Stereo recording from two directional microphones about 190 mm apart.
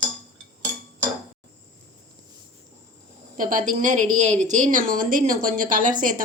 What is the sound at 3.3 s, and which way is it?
A woman's voice, 45° right (ahead or behind).